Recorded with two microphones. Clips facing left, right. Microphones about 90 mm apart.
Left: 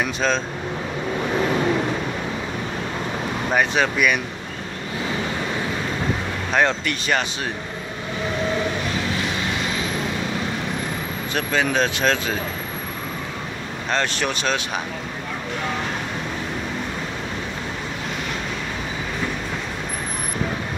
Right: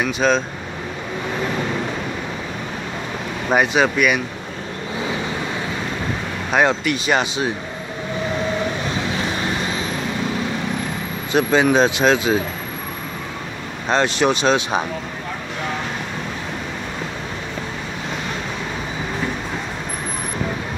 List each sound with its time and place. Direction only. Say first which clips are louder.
0.0 s speech: right 4 dB; 10° right (ahead or behind)
3.5 s speech: right 4 dB; 10° right (ahead or behind)
6.5 s speech: right 3 dB; 10° right (ahead or behind)
11.3 s speech: right 6 dB; 20° right (ahead or behind)
13.8 s speech: right 6 dB; 20° right (ahead or behind)